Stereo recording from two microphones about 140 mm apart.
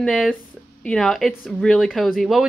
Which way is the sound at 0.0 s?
Centre (ahead or behind).